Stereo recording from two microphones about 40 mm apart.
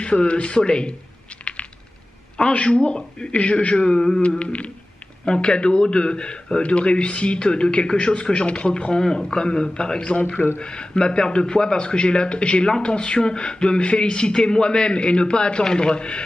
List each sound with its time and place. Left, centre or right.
0.0 s a man's voice: left
1.3 s a sound: left
2.5 s a man's voice: left
4.2 s humming: left
5.2 s a man's voice: left
9.0 s a man's voice: centre
10.1 s humming: left
10.6 s a man's voice: left